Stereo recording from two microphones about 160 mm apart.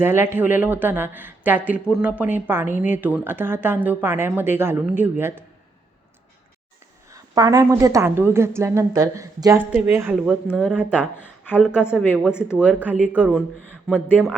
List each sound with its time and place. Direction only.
0.0 s speech: 15° right (ahead or behind)
7.1 s a woman's voice: 20° right (ahead or behind)